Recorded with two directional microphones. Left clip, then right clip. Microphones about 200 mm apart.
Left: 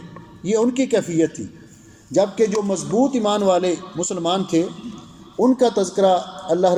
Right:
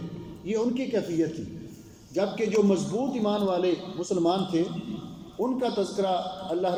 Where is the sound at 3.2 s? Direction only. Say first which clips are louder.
Left 4 dB; 60° left (ahead or behind).